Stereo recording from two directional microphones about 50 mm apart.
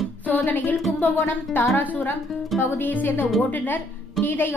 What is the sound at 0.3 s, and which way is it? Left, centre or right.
Music, left.